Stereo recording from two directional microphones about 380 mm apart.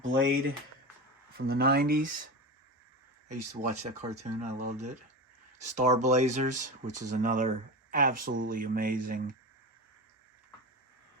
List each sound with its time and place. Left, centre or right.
0.0 s speech: right
3.2 s speech: centre